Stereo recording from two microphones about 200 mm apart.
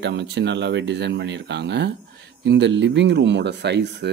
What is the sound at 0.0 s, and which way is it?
Speech, 60° right (ahead or behind).